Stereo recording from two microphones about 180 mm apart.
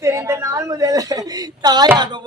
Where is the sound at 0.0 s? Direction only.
15° right (ahead or behind).